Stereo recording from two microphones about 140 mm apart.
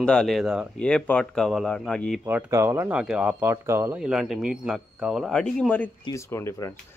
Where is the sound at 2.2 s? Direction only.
20° right (ahead or behind).